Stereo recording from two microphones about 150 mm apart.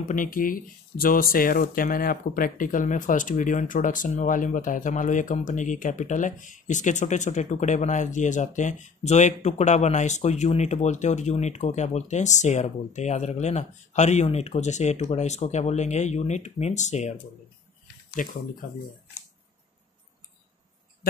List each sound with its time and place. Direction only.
0.1 s speech: 65° left (ahead or behind)
18.2 s speech: 60° left (ahead or behind)